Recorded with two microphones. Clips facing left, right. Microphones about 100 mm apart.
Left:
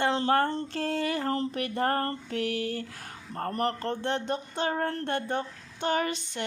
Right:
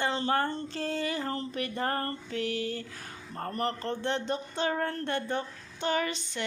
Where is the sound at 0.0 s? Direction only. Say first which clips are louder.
Left 4 dB; 75° left (ahead or behind).